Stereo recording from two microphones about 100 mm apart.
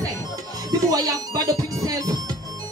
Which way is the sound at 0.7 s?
40° right (ahead or behind).